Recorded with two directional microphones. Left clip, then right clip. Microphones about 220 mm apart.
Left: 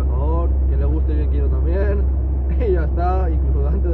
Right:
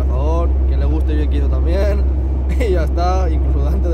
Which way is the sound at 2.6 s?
30° right (ahead or behind).